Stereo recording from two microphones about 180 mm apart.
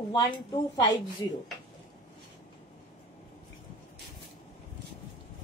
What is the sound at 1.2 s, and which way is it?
Speech, 20° left (ahead or behind).